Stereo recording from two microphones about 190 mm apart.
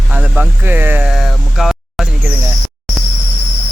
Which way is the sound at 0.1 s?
5° right (ahead or behind).